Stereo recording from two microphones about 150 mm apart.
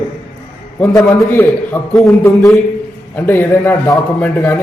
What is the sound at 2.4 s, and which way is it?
Speech, centre (ahead or behind).